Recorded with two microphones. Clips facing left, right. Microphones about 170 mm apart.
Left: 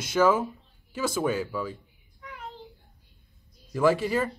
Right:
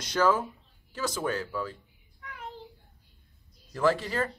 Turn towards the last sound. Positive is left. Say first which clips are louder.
# left 3 dB
turn(degrees=10)  # may be behind; listen again after turning